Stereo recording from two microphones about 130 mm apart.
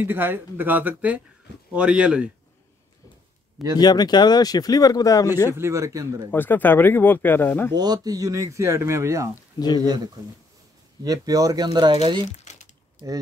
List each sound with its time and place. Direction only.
0.0 s speech: 15° right (ahead or behind)
3.7 s speech: 30° left (ahead or behind)
5.5 s speech: 20° right (ahead or behind)
6.3 s speech: 15° left (ahead or behind)
7.7 s speech: 30° right (ahead or behind)
12.3 s crumpling: 65° left (ahead or behind)